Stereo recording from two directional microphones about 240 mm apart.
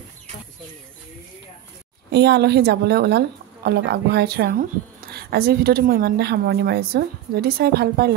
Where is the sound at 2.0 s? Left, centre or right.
Right.